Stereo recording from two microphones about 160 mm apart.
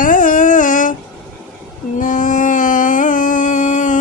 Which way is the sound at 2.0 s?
55° left (ahead or behind).